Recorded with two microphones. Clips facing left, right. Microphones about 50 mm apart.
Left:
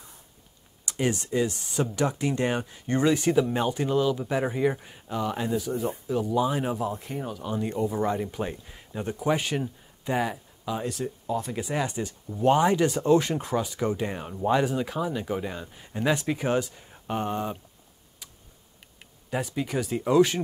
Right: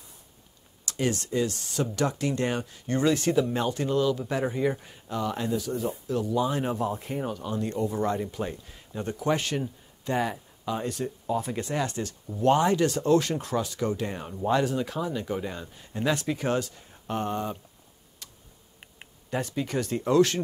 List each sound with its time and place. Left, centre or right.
0.8 s speech: centre
7.4 s speech: centre
18.2 s tick: centre
19.3 s speech: centre